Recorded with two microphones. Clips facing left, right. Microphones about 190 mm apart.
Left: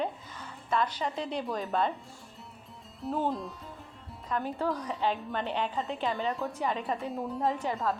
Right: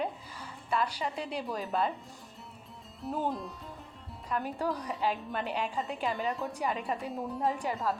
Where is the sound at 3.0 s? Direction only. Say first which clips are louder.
Left 3 dB; centre (ahead or behind).